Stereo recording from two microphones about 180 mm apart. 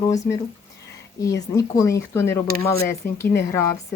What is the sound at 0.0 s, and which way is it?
Speech, 20° left (ahead or behind).